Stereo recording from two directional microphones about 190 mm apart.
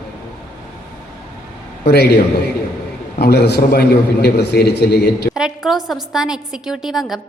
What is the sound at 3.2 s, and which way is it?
A man's voice, 55° left (ahead or behind).